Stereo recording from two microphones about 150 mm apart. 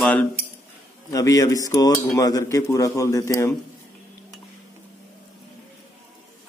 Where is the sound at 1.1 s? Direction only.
25° left (ahead or behind).